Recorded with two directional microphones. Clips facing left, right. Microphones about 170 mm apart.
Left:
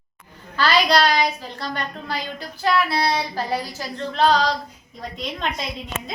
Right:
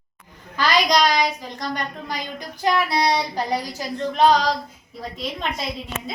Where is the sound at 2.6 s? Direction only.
20° right (ahead or behind).